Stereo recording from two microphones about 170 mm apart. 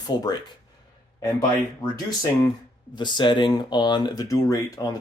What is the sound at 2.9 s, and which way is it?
Speech, 25° left (ahead or behind).